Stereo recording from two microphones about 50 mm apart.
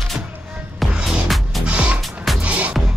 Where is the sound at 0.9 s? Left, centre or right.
Centre.